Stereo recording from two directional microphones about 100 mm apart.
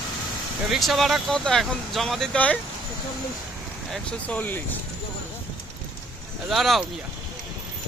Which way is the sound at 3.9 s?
10° left (ahead or behind).